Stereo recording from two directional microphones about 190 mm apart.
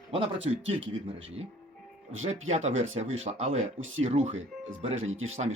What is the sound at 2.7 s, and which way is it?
Speech, 90° right.